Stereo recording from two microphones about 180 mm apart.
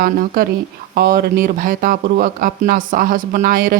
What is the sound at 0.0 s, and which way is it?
Speech, 55° right (ahead or behind).